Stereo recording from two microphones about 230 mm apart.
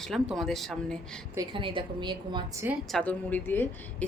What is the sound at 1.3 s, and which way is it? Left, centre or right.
A woman's voice, centre.